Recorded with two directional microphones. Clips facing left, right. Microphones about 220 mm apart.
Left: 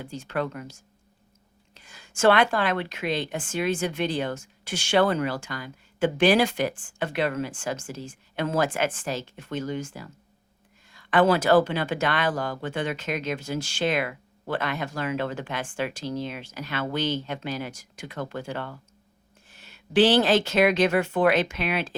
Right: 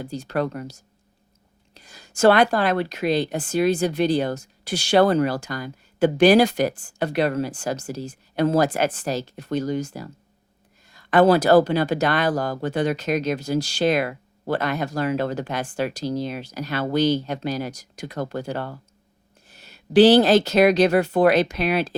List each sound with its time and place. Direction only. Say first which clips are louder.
0.0 s a woman's voice: right 4 dB; 40° right (ahead or behind)